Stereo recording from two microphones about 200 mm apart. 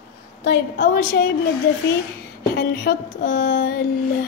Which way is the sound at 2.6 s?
50° left (ahead or behind).